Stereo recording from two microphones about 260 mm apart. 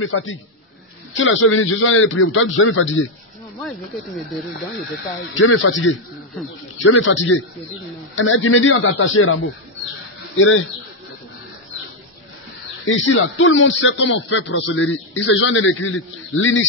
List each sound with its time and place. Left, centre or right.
0.0 s a man's voice: left
3.6 s speech: centre
5.3 s a man's voice: left
12.8 s a man's voice: left